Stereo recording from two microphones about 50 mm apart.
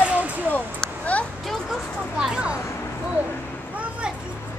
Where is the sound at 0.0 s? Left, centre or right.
Right.